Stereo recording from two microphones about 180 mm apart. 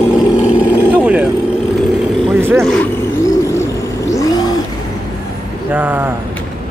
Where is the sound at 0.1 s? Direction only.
5° right (ahead or behind).